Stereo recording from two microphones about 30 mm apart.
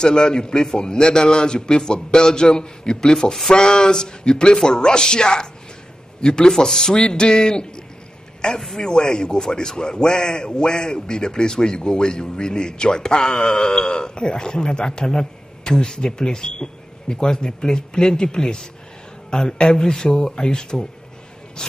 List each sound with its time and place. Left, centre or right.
0.0 s a man's voice: left
3.2 s speech: centre
3.4 s a man's voice: left